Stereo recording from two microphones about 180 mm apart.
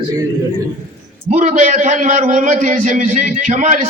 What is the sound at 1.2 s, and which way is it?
A man's voice, 40° right (ahead or behind).